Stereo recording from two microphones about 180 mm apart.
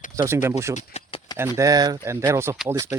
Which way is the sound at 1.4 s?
15° right (ahead or behind).